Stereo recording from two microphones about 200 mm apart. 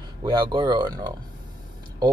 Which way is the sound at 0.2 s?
20° right (ahead or behind).